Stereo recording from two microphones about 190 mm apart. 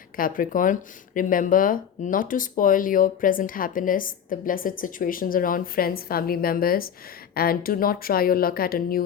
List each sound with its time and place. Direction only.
0.2 s speech: 45° left (ahead or behind)